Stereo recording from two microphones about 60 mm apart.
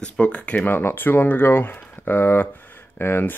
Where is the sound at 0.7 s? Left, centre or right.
Left.